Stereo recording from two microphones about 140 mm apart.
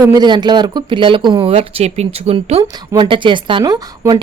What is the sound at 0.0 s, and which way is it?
Speech, 30° right (ahead or behind).